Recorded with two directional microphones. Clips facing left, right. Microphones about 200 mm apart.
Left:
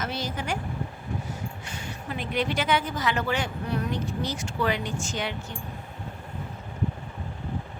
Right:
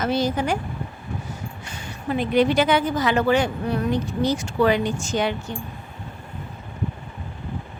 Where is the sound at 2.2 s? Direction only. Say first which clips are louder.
Right 9 dB; 35° right (ahead or behind).